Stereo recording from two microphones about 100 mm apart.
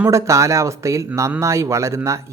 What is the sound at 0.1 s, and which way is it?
Speech, 30° right (ahead or behind).